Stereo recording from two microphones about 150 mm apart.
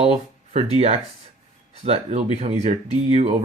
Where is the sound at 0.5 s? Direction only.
40° right (ahead or behind).